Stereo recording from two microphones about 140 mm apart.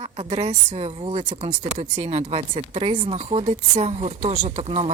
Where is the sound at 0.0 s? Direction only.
45° right (ahead or behind).